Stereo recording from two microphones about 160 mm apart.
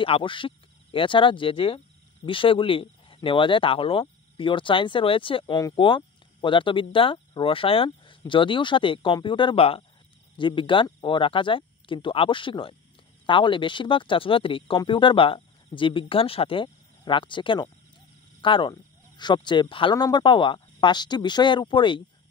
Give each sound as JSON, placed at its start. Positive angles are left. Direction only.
{"t": 0.0, "sound": "speech", "side_deg": 35}